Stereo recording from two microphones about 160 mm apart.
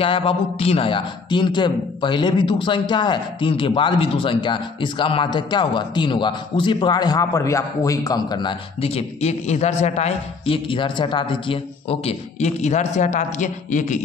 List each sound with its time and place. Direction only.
0.0 s a man's voice: 35° left (ahead or behind); by 14.0 s 50° left (ahead or behind)